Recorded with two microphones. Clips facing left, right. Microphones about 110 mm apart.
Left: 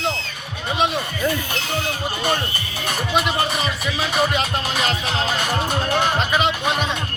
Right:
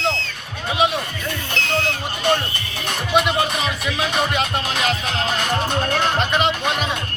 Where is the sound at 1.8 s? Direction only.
10° left (ahead or behind).